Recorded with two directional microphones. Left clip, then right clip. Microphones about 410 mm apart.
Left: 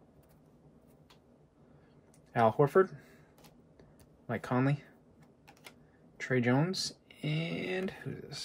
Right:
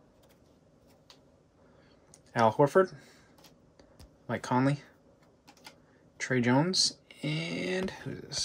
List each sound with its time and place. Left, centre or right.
2.3 s speech: centre
4.3 s speech: centre
6.1 s speech: centre